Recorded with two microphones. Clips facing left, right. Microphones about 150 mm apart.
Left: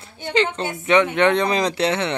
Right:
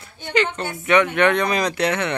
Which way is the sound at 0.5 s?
25° left (ahead or behind).